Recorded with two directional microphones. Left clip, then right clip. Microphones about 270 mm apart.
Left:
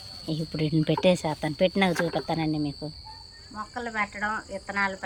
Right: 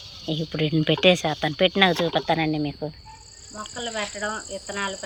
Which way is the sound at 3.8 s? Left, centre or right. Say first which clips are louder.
Even; left.